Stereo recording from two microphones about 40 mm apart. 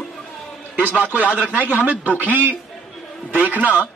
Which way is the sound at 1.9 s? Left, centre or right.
Right.